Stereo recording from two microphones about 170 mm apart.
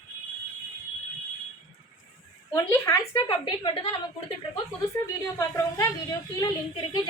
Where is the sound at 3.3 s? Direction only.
30° left (ahead or behind).